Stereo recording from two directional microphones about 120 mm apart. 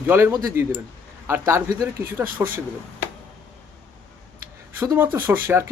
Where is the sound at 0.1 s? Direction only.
20° right (ahead or behind).